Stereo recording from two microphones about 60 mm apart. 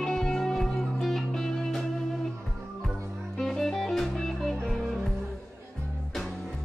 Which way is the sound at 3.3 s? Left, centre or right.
Centre.